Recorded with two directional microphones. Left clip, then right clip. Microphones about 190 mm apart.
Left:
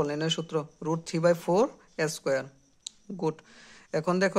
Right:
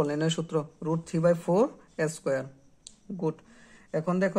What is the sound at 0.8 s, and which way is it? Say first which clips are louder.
A man's voice: even; 30° left (ahead or behind).